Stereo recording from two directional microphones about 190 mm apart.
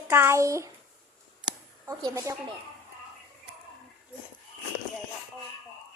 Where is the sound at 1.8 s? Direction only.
15° right (ahead or behind).